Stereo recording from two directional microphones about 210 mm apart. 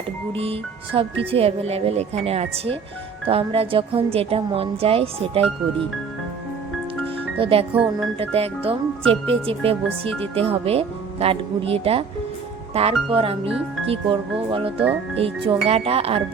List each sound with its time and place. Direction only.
0.3 s speech: 25° right (ahead or behind)
7.3 s speech: 25° right (ahead or behind)